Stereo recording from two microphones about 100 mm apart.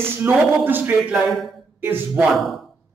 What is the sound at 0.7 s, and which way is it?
Speech, 20° right (ahead or behind).